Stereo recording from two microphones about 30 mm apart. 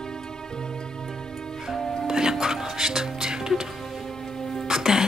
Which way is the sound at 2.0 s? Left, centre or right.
Centre.